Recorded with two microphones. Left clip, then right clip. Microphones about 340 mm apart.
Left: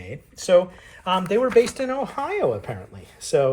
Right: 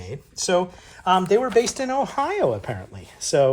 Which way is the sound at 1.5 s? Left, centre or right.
Right.